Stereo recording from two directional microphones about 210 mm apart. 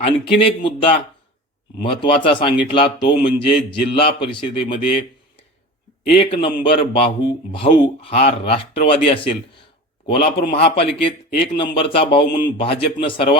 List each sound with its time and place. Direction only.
0.0 s a man's voice: 25° left (ahead or behind)
6.1 s a man's voice: 25° left (ahead or behind)